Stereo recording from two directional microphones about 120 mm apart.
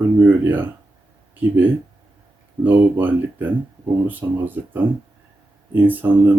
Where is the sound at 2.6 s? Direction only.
15° right (ahead or behind).